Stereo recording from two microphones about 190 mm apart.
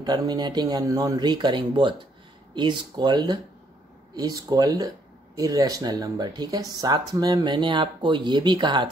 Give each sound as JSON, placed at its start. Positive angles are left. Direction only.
{"t": 0.0, "sound": "speech", "side_deg": -20}